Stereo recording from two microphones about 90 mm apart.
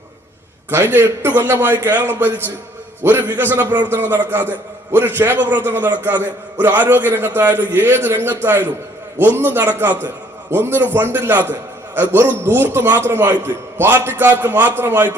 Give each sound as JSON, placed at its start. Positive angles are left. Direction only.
{"t": 0.7, "sound": "a man's voice", "side_deg": -25}